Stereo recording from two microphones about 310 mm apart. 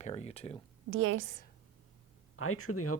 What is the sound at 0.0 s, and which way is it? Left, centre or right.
Speech, left.